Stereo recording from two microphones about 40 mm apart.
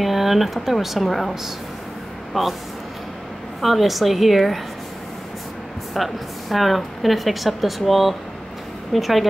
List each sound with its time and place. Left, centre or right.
0.0 s a woman's voice: centre
2.3 s speech: centre
3.6 s a woman's voice: centre
5.9 s a woman's voice: centre